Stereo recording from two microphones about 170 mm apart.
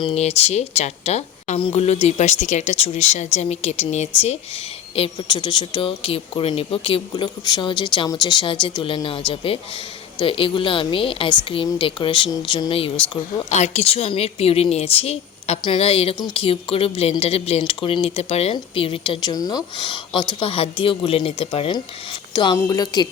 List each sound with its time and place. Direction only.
0.0 s speech: 35° left (ahead or behind)
4.9 s speech: 30° left (ahead or behind)
13.5 s speech: 40° left (ahead or behind)
22.3 s a sound: 25° left (ahead or behind)
22.5 s speech: 20° left (ahead or behind)